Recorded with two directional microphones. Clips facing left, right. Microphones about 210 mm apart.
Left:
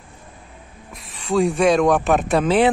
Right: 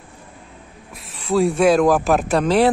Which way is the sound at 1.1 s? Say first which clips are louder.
Right 1 dB; centre (ahead or behind).